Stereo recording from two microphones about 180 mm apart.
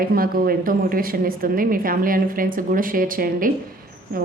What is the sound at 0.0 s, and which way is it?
A woman's voice, 55° right (ahead or behind).